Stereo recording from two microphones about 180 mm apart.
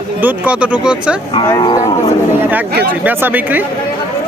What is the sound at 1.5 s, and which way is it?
Speech, 20° left (ahead or behind).